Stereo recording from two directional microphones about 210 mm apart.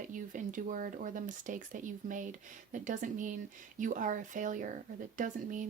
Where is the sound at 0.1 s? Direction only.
40° right (ahead or behind).